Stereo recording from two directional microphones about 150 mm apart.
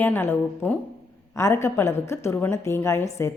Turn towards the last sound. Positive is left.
turn(degrees=20)  # may be behind; listen again after turning